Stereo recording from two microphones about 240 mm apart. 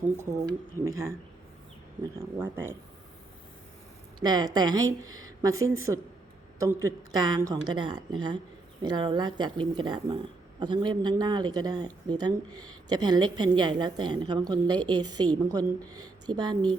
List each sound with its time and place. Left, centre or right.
0.2 s a woman's voice: centre
2.4 s a woman's voice: centre
4.2 s a woman's voice: centre